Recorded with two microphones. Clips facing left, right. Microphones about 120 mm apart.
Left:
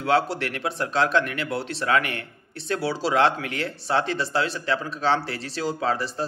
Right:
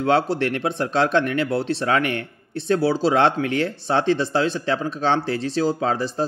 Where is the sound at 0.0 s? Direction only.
25° right (ahead or behind).